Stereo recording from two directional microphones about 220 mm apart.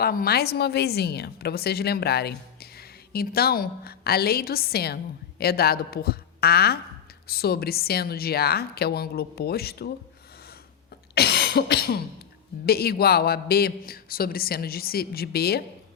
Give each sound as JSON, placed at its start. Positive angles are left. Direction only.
{"t": 0.0, "sound": "a woman's voice", "side_deg": 45}
{"t": 11.1, "sound": "cough", "side_deg": 45}
{"t": 12.6, "sound": "a woman's voice", "side_deg": 45}